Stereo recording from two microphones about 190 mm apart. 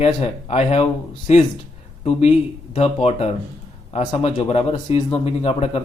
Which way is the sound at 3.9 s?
30° left (ahead or behind).